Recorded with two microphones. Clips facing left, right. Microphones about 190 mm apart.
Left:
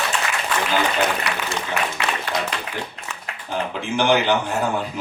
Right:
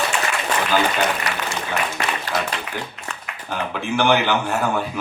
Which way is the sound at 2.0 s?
45° right (ahead or behind).